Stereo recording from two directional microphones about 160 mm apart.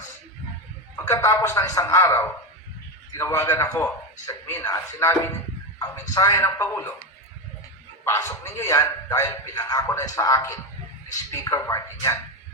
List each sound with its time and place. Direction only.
1.0 s a man's voice: 20° left (ahead or behind)
8.0 s a man's voice: 15° left (ahead or behind)